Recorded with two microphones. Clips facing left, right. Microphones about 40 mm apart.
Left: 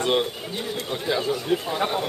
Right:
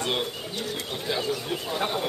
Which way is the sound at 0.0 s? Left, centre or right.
Centre.